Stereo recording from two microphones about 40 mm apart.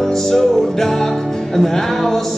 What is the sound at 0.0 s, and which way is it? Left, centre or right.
Music, centre.